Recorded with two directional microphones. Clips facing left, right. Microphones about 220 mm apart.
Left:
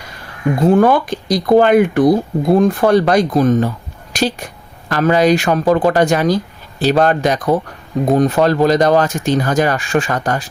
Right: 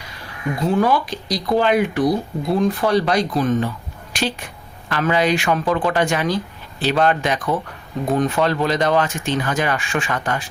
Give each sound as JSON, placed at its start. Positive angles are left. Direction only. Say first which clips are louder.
{"t": 0.6, "sound": "speech", "louder": "left 6 dB", "side_deg": 50}